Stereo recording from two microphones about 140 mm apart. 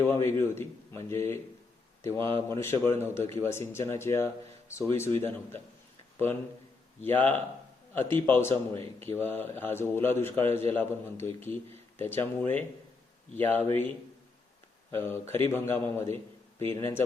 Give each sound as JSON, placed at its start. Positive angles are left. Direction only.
{"t": 0.0, "sound": "a man's voice", "side_deg": 20}
{"t": 7.0, "sound": "a man's voice", "side_deg": 15}
{"t": 8.5, "sound": "a man's voice", "side_deg": -40}
{"t": 9.0, "sound": "a man's voice", "side_deg": 15}
{"t": 14.9, "sound": "a man's voice", "side_deg": 15}